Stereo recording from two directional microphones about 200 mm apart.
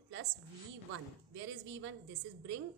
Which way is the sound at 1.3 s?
70° right (ahead or behind).